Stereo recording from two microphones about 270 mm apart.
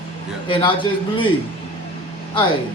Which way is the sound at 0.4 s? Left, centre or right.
Centre.